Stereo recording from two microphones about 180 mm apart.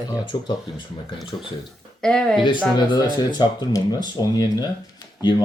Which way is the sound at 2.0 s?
5° left (ahead or behind).